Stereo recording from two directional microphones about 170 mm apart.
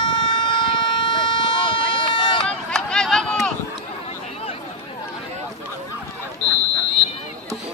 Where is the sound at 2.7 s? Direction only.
5° left (ahead or behind).